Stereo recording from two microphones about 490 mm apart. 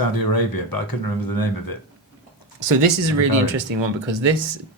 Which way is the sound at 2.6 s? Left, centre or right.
Right.